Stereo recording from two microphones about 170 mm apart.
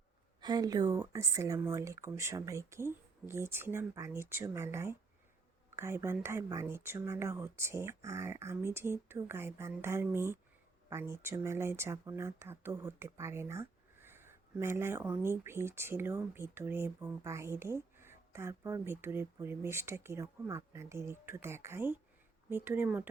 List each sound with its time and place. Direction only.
0.4 s speech: 25° right (ahead or behind)